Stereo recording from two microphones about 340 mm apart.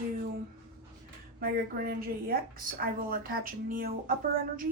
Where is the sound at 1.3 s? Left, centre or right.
Right.